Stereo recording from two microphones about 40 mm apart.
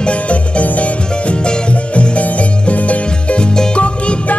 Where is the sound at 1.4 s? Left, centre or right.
Left.